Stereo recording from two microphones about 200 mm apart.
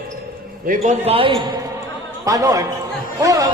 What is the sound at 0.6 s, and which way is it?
A man's voice, 40° right (ahead or behind).